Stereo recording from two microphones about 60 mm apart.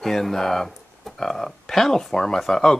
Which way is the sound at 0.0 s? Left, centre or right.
Centre.